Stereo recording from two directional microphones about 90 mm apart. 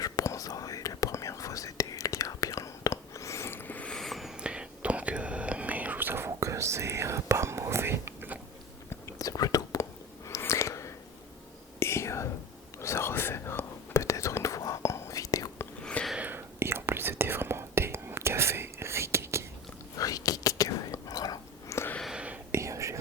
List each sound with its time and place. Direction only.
0.0 s whispering: 40° left (ahead or behind); by 3.8 s 20° left (ahead or behind)
3.8 s whispering: 5° left (ahead or behind); by 8.4 s 25° right (ahead or behind)
8.9 s whispering: 35° left (ahead or behind)
10.2 s a sound: 35° left (ahead or behind)
11.8 s whispering: 30° left (ahead or behind)
15.8 s a sound: 10° left (ahead or behind)
16.1 s whispering: 20° right (ahead or behind)
20.0 s whispering: 40° left (ahead or behind)
22.0 s whispering: 10° right (ahead or behind)
22.5 s whispering: 35° right (ahead or behind)